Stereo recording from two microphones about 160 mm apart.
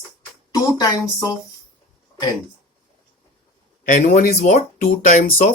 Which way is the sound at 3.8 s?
50° left (ahead or behind).